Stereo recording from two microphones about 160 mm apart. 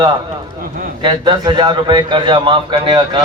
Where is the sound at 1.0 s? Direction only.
30° right (ahead or behind).